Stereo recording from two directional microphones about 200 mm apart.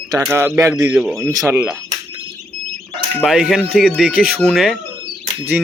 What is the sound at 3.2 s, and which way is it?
Speech, centre (ahead or behind).